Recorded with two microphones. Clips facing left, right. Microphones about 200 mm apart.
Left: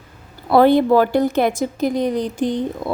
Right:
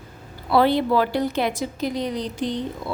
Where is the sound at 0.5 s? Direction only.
50° left (ahead or behind).